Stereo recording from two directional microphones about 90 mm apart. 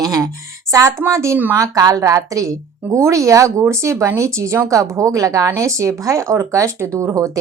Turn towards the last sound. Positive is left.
turn(degrees=-35)  # may be behind; listen again after turning